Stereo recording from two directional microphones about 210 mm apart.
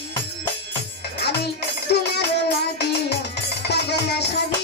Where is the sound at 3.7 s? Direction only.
50° left (ahead or behind).